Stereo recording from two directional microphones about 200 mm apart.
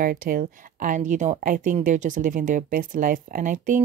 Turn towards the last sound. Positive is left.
turn(degrees=-40)  # may be behind; listen again after turning